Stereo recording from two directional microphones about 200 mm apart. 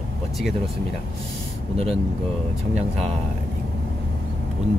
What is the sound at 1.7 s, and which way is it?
Speech, 30° right (ahead or behind).